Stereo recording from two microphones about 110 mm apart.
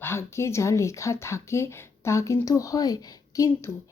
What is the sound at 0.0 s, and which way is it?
A woman's voice, 25° left (ahead or behind).